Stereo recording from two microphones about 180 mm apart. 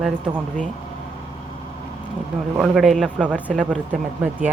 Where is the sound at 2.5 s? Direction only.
Centre (ahead or behind).